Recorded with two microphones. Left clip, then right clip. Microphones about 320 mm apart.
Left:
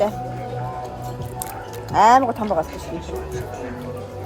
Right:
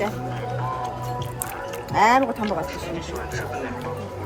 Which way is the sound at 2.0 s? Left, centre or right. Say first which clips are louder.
Left 4 dB; centre.